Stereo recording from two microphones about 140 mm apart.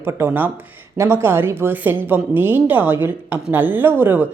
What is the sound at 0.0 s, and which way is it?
Speech, 15° right (ahead or behind).